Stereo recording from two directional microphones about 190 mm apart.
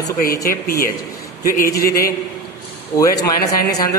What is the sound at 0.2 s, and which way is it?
A man's voice, 50° left (ahead or behind).